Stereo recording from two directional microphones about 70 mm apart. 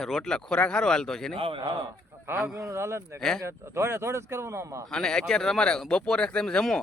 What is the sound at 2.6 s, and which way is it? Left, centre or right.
Speech, right.